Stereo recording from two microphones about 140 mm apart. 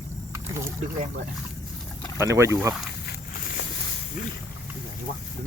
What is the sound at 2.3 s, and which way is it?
Speech, 20° right (ahead or behind).